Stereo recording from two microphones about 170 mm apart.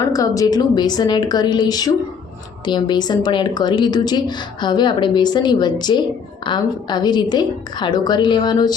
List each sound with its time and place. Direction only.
0.1 s a woman's voice: 20° left (ahead or behind)